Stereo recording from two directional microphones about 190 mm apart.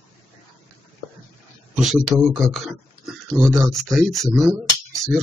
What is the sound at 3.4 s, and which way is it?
Speech, 15° right (ahead or behind).